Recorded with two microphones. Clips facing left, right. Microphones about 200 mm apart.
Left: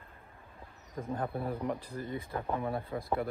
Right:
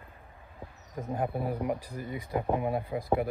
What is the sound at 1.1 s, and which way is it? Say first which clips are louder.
Speech: right 3 dB; 10° right (ahead or behind).